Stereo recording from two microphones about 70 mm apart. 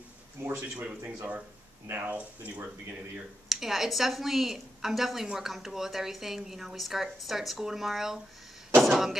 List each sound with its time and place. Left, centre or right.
0.4 s speech: right
0.7 s speech: right
3.4 s a woman's voice: centre